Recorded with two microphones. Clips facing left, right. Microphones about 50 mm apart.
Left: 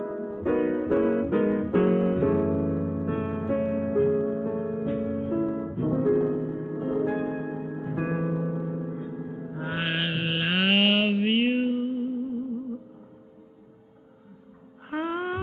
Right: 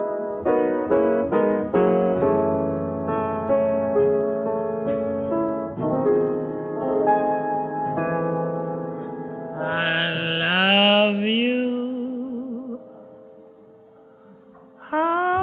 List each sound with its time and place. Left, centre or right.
0.0 s music: right
0.5 s music: centre; by 9.6 s right
9.6 s mantra: centre
14.9 s music: right